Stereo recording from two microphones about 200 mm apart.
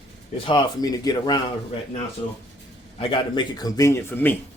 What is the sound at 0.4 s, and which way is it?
Speech, 20° left (ahead or behind).